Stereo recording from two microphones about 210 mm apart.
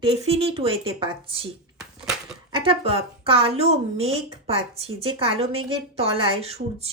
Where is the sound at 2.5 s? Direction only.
25° right (ahead or behind).